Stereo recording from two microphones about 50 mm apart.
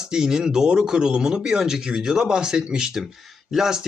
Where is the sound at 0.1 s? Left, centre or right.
Centre.